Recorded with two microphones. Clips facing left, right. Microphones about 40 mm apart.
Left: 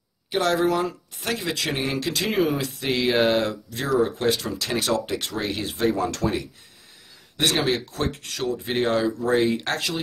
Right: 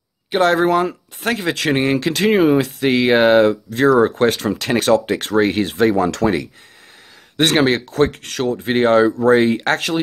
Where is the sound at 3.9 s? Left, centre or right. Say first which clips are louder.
Right 4 dB; right.